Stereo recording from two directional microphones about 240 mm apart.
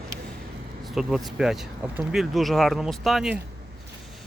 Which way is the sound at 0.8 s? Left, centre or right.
Centre.